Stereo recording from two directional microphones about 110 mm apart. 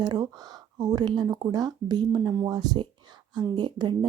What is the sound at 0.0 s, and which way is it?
Speech, 35° right (ahead or behind).